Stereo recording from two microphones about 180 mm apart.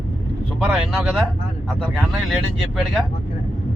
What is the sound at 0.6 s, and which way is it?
Speech, 5° right (ahead or behind).